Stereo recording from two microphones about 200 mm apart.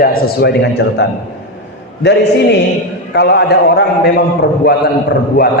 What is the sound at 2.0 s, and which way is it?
A man's voice, 60° left (ahead or behind).